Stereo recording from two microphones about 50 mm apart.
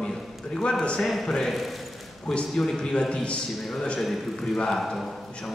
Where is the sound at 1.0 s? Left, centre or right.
Centre.